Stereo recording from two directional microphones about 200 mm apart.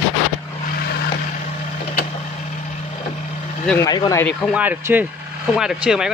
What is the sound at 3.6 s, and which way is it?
Speech, 10° left (ahead or behind).